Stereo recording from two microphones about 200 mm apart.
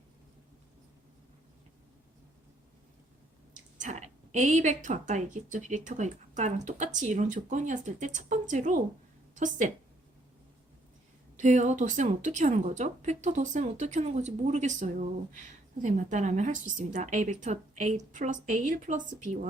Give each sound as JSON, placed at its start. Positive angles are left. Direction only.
{"t": 3.8, "sound": "a woman's voice", "side_deg": -35}
{"t": 11.3, "sound": "a woman's voice", "side_deg": -35}